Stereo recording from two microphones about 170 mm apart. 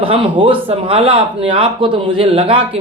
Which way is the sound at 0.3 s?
30° right (ahead or behind).